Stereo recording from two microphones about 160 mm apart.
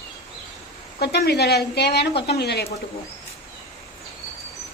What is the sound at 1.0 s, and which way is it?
Speech, 90° left.